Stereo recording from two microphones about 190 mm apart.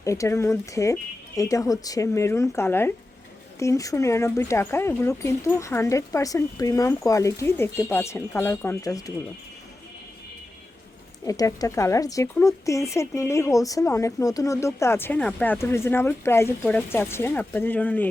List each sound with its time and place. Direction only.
0.0 s a woman's voice: 15° left (ahead or behind)
11.3 s a woman's voice: 20° left (ahead or behind)